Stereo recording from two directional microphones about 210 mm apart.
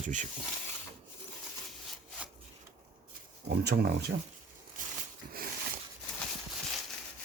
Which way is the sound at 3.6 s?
50° right (ahead or behind).